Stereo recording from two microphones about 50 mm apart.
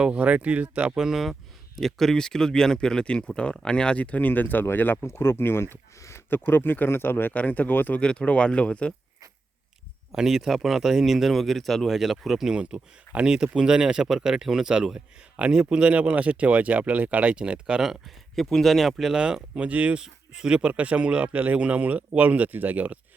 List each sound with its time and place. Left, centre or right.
0.0 s a man's voice: right
0.9 s speech: centre
1.8 s speech: centre; by 5.0 s left
5.0 s speech: left
6.0 s a sound: left
6.3 s speech: left
7.3 s speech: left
8.0 s speech: left
10.1 s speech: centre
12.5 s a man's voice: right
17.8 s speech: centre
19.1 s a man's voice: centre
20.0 s a man's voice: centre; by 23.0 s right